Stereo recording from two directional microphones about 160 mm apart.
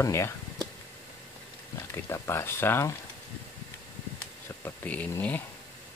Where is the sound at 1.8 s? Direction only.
15° left (ahead or behind).